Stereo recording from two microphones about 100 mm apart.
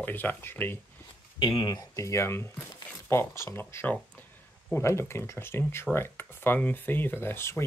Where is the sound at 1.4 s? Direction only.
50° left (ahead or behind).